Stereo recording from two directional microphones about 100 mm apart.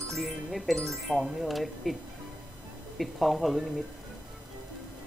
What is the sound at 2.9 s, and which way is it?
Speech, centre (ahead or behind).